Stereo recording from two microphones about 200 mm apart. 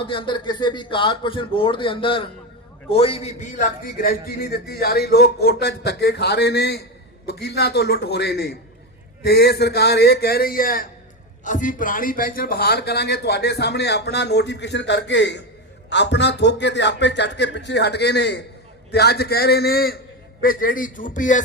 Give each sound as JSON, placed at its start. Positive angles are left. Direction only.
{"t": 0.0, "sound": "a man's voice", "side_deg": 25}